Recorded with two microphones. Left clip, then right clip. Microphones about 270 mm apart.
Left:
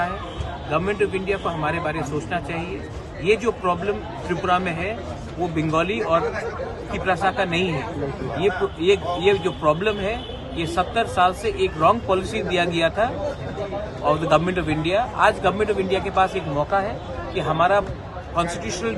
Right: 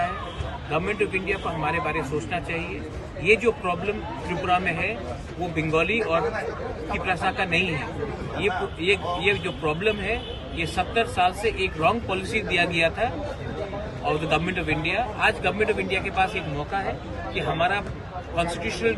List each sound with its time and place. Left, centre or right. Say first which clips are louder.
0.7 s a man's voice: left 3 dB; centre
9.2 s a man's voice: left 5 dB; centre